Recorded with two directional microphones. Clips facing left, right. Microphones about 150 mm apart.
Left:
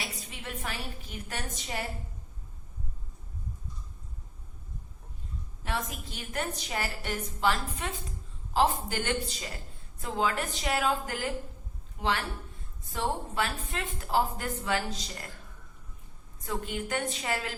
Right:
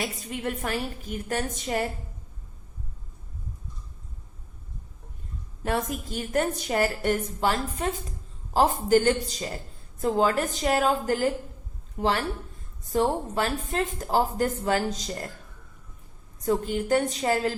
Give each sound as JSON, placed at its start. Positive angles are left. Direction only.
{"t": 0.0, "sound": "a woman's voice", "side_deg": -50}
{"t": 5.6, "sound": "a woman's voice", "side_deg": -45}
{"t": 16.4, "sound": "a woman's voice", "side_deg": -40}